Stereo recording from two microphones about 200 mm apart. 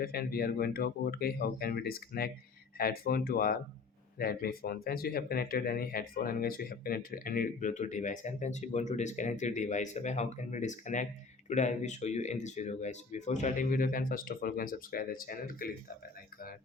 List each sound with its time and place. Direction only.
0.0 s speech: 50° left (ahead or behind)